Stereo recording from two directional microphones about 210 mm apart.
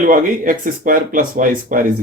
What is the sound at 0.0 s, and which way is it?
Speech, 40° right (ahead or behind).